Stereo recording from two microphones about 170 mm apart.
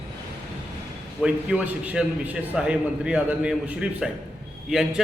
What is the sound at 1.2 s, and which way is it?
A man's voice, 10° right (ahead or behind).